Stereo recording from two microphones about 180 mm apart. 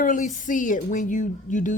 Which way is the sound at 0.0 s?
45° left (ahead or behind).